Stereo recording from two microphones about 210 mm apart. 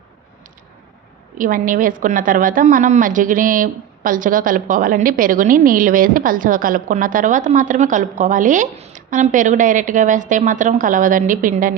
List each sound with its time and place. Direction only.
1.4 s a woman's voice: 40° right (ahead or behind)